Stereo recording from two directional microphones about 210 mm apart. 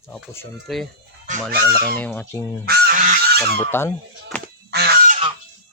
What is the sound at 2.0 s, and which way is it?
Speech, 10° left (ahead or behind).